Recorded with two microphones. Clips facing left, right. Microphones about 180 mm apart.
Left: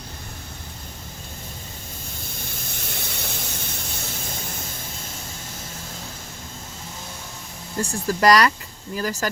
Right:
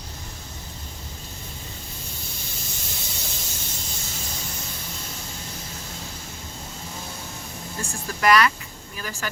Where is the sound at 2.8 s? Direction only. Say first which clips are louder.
Left 3 dB; 60° left (ahead or behind).